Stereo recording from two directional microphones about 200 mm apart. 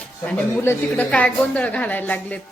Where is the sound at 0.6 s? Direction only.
10° left (ahead or behind).